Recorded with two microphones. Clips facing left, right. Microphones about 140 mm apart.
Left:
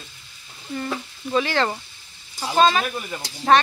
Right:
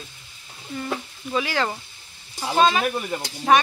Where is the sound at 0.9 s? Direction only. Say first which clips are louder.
Left 1 dB; 10° right (ahead or behind).